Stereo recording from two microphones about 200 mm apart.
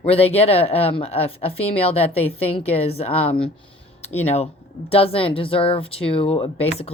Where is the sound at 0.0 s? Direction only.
30° left (ahead or behind).